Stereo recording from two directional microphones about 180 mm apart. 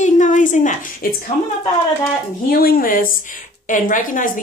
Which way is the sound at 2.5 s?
55° left (ahead or behind).